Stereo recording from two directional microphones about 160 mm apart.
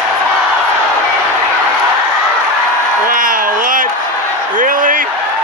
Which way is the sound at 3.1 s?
60° right (ahead or behind).